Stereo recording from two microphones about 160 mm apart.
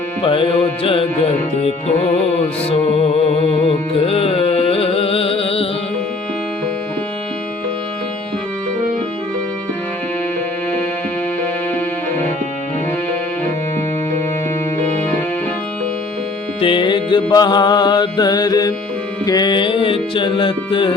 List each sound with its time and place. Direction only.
0.2 s music: 35° left (ahead or behind)
16.6 s music: 30° left (ahead or behind)